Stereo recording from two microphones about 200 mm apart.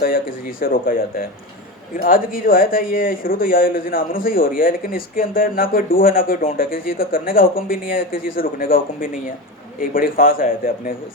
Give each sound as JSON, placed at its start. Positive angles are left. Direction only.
{"t": 0.0, "sound": "speech", "side_deg": 45}